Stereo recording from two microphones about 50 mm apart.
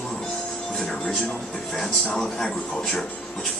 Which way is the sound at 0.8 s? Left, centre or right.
Centre.